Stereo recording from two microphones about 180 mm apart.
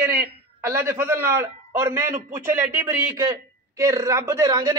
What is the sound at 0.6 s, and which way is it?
A man's voice, 15° right (ahead or behind).